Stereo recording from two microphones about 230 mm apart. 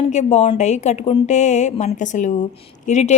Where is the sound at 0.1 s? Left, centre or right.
Left.